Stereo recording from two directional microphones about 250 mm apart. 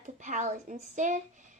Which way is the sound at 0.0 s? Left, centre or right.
Right.